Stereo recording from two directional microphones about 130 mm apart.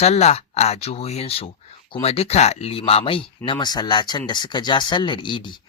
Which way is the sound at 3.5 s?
35° left (ahead or behind).